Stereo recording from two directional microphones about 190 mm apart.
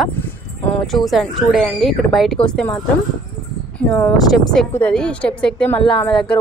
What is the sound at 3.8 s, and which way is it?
A woman's voice, centre (ahead or behind).